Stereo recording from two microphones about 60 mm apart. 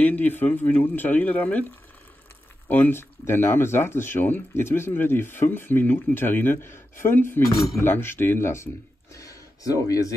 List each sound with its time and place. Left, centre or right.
0.0 s speech: left
2.7 s speech: left
7.4 s speech: centre
7.8 s speech: left
9.1 s a sound: left